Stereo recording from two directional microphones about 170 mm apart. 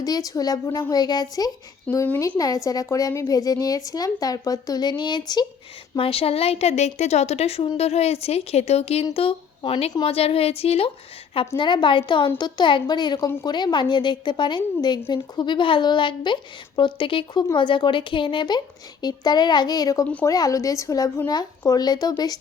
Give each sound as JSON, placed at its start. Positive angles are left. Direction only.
{"t": 0.0, "sound": "a woman's voice", "side_deg": 20}
{"t": 20.1, "sound": "a woman's voice", "side_deg": 10}
{"t": 20.3, "sound": "a woman's voice", "side_deg": 20}